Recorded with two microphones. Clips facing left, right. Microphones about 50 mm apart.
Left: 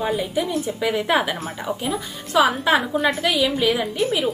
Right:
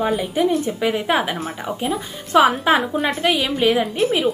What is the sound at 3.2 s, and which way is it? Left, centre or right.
Speech, right.